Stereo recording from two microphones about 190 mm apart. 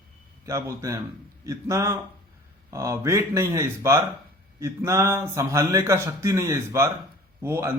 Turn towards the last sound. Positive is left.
turn(degrees=-15)  # may be behind; listen again after turning